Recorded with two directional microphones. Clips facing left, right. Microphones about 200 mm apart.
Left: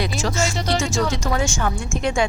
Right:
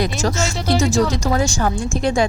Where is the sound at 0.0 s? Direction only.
40° right (ahead or behind).